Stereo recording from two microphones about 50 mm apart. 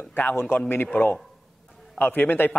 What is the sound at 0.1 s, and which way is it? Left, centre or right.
Speech, left.